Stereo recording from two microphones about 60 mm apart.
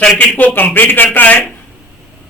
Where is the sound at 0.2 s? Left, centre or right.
Left.